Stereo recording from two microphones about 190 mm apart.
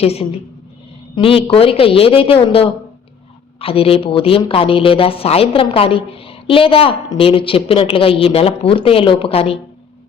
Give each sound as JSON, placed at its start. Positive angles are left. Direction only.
{"t": 0.0, "sound": "a woman's voice", "side_deg": 30}